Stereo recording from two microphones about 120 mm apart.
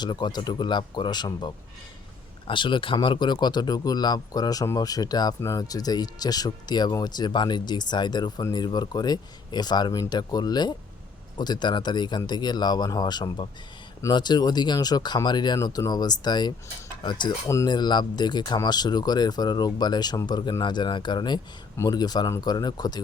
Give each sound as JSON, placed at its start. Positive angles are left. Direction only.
{"t": 0.0, "sound": "speech", "side_deg": 35}